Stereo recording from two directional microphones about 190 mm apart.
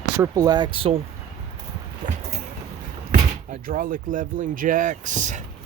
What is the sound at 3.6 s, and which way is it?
Speech, 45° right (ahead or behind).